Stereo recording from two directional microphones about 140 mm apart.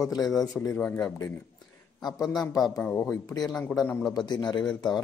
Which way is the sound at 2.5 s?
25° left (ahead or behind).